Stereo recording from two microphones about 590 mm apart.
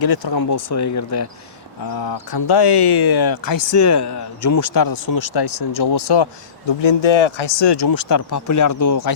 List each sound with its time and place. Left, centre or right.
0.0 s speech: left
6.8 s speech: left